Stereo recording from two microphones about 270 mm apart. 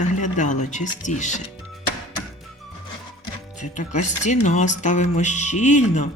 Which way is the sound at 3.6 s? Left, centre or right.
Left.